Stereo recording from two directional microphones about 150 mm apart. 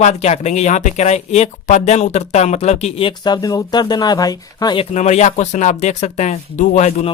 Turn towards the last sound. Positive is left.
turn(degrees=50)  # may be behind; listen again after turning